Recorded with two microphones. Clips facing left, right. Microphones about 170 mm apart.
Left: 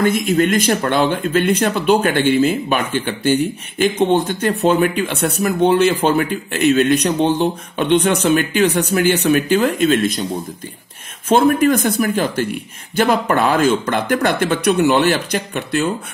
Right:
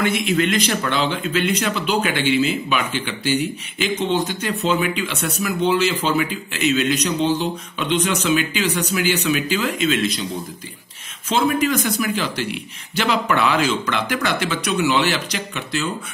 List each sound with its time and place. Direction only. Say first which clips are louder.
0.0 s speech: left 4 dB; 45° left (ahead or behind)
11.2 s speech: left 6 dB; 55° left (ahead or behind)